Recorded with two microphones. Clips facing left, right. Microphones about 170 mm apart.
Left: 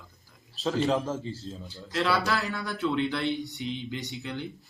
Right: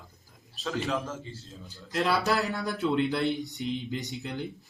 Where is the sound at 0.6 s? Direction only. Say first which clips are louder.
Left 5 dB; 30° left (ahead or behind).